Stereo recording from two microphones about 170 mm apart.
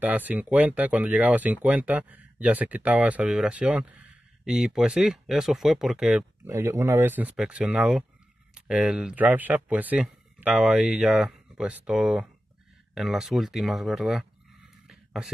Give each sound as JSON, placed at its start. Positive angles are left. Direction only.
{"t": 0.0, "sound": "speech", "side_deg": -10}
{"t": 6.4, "sound": "speech", "side_deg": -15}
{"t": 14.9, "sound": "a sound", "side_deg": 0}